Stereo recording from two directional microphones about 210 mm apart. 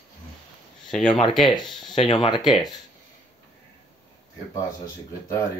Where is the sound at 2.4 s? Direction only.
Centre (ahead or behind).